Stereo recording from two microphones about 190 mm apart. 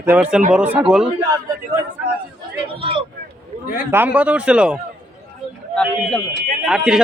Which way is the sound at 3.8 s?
10° right (ahead or behind).